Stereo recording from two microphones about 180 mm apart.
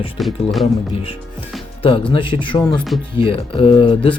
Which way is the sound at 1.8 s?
30° left (ahead or behind).